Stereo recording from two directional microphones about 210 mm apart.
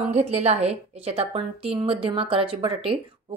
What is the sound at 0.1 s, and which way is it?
Speech, 30° right (ahead or behind).